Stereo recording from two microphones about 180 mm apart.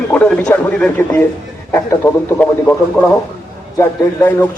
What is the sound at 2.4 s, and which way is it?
A man's voice, 10° left (ahead or behind).